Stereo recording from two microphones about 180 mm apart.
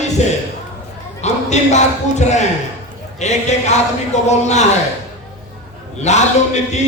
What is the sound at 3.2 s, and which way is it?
Speech, 40° left (ahead or behind).